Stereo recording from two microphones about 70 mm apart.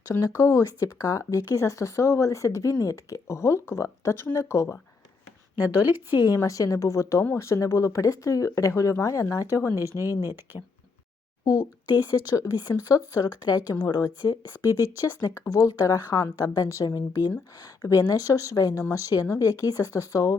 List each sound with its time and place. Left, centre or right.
0.2 s speech: left
5.5 s speech: right
6.1 s speech: left
9.7 s speech: right
12.3 s speech: left
13.1 s a woman's voice: left
14.6 s a woman's voice: left
17.6 s speech: left